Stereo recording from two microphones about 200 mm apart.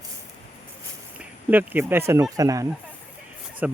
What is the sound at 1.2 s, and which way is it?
Speech, 10° right (ahead or behind).